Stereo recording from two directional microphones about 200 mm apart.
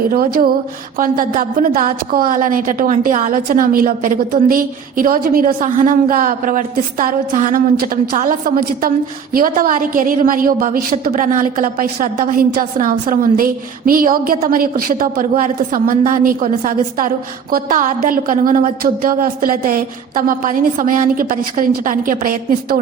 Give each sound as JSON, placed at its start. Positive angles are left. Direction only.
{"t": 0.1, "sound": "a woman's voice", "side_deg": -45}